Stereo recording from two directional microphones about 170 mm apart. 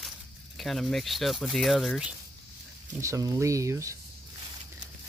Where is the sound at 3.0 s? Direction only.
20° right (ahead or behind).